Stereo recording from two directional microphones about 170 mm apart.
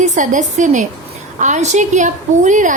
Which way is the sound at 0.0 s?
45° right (ahead or behind).